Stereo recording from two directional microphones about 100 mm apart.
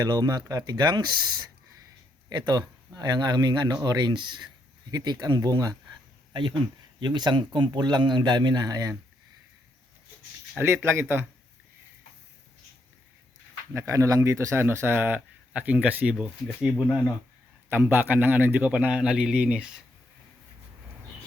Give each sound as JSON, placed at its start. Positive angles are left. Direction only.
{"t": 0.0, "sound": "speech", "side_deg": -40}
{"t": 3.0, "sound": "speech", "side_deg": -45}
{"t": 4.9, "sound": "speech", "side_deg": -40}
{"t": 7.0, "sound": "speech", "side_deg": -45}
{"t": 10.6, "sound": "speech", "side_deg": -25}
{"t": 13.7, "sound": "a man's voice", "side_deg": -30}
{"t": 17.7, "sound": "a man's voice", "side_deg": -20}